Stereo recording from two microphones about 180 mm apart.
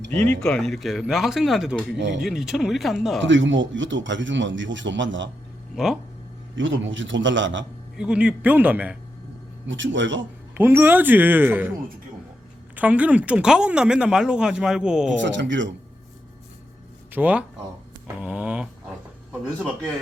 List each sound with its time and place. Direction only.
0.2 s speech: 5° left (ahead or behind)
3.2 s speech: 90° right
5.7 s speech: centre (ahead or behind)
6.6 s speech: 90° right
7.9 s speech: 5° right (ahead or behind)
9.6 s speech: 90° right
10.6 s speech: 10° right (ahead or behind)
12.7 s speech: 10° right (ahead or behind)
15.2 s speech: 85° right
17.1 s speech: 10° right (ahead or behind)
18.2 s a sound: 5° right (ahead or behind)